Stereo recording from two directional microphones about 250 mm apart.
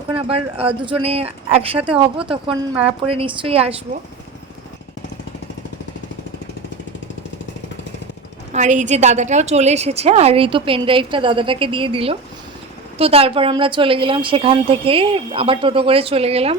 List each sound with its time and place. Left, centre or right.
0.1 s a woman's voice: right
8.5 s a woman's voice: right